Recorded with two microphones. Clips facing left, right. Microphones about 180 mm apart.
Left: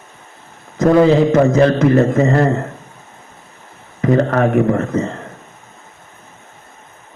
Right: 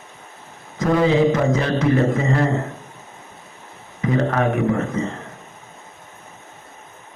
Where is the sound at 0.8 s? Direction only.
45° left (ahead or behind).